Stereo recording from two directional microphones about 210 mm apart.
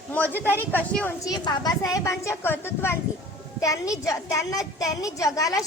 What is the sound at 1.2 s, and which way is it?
A child's voice, 20° left (ahead or behind).